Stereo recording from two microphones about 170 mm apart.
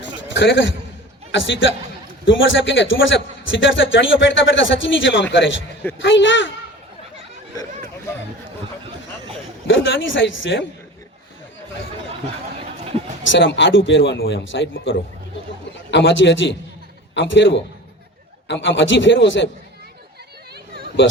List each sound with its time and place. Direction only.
0.3 s a man's voice: 90° left
9.6 s speech: 90° left
13.2 s a man's voice: 90° left
15.7 s a man's voice: 90° left